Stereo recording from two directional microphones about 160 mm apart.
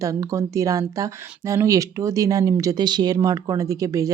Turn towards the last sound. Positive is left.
turn(degrees=-20)  # may be behind; listen again after turning